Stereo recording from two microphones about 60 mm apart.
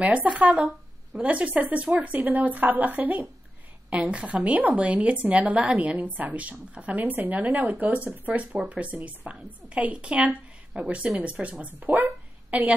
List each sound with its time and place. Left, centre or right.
0.0 s a woman's voice: right